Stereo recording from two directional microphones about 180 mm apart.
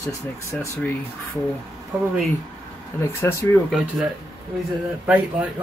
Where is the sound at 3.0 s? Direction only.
15° left (ahead or behind).